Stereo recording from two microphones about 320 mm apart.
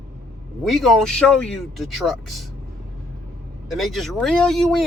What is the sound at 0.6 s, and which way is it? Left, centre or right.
A man's voice, centre.